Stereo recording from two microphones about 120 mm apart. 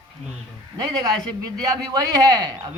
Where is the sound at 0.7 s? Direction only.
30° right (ahead or behind).